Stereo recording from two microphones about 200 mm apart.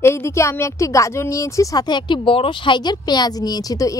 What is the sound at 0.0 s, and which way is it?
A woman's voice, 15° left (ahead or behind).